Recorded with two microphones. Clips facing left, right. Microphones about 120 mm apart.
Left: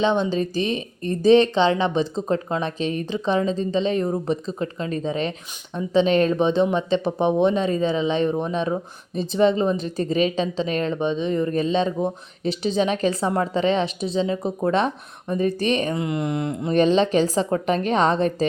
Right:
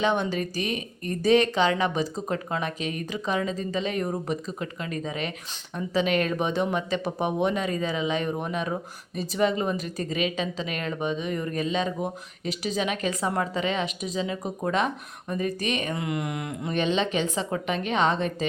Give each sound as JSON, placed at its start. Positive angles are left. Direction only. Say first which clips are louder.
{"t": 0.0, "sound": "a woman's voice", "louder": "left 4 dB", "side_deg": 20}